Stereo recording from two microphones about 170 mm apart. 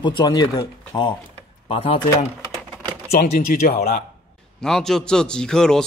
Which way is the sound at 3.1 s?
65° left (ahead or behind).